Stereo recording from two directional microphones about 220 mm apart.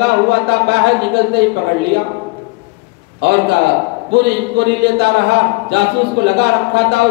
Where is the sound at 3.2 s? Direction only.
50° right (ahead or behind).